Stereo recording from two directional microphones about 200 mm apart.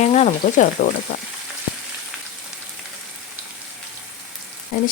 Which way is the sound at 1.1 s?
35° left (ahead or behind).